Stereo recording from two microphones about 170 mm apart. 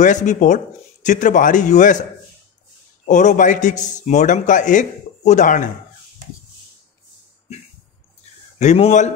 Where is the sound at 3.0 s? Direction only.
45° left (ahead or behind).